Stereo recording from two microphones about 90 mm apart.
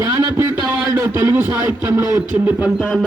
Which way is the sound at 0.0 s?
30° right (ahead or behind).